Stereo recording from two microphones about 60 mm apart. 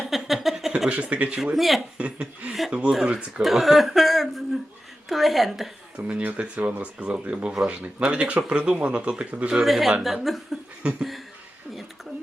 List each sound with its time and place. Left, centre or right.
0.0 s a sound: centre
0.9 s speech: centre
1.5 s speech: centre
2.0 s speech: centre
2.5 s speech: centre
3.4 s speech: centre
6.0 s speech: right
9.6 s speech: centre
10.8 s speech: right